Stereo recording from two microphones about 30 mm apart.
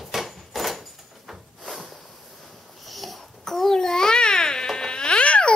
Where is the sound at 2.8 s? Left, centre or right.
Centre.